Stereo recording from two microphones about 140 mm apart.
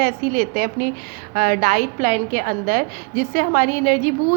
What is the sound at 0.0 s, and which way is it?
A woman's voice, 90° right.